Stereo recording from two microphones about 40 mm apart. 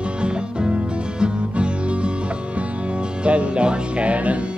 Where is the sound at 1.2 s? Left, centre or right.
Right.